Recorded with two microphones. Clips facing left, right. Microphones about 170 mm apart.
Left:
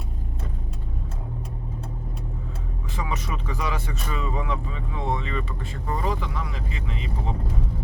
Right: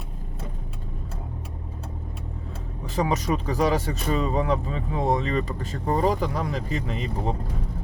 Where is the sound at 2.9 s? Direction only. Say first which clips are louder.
Right 8 dB; 40° right (ahead or behind).